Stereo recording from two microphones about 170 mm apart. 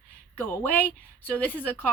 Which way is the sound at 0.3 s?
10° left (ahead or behind).